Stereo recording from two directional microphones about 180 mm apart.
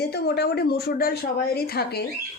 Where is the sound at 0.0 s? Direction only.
65° left (ahead or behind).